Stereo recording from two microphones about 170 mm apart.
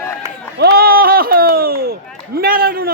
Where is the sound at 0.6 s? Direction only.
65° right (ahead or behind).